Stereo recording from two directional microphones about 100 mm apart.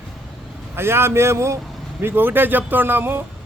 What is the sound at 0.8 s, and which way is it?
A man's voice, 25° right (ahead or behind).